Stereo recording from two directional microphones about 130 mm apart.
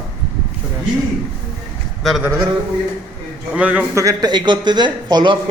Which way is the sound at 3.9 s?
25° right (ahead or behind).